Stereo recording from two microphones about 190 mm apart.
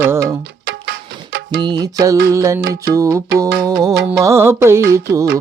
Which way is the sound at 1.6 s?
20° right (ahead or behind).